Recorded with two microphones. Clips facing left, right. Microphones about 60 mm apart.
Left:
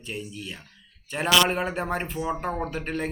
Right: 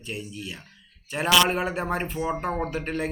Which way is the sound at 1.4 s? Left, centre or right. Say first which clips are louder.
Even; centre.